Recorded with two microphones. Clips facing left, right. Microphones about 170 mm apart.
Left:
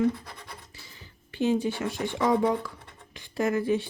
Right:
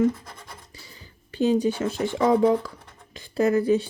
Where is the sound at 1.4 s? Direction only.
40° right (ahead or behind).